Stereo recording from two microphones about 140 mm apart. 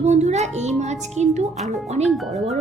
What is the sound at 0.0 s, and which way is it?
A woman's voice, 55° right (ahead or behind).